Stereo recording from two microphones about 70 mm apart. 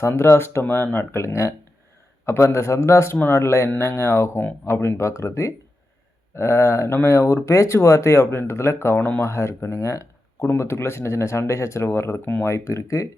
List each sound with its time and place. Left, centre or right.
0.1 s speech: left
9.2 s speech: left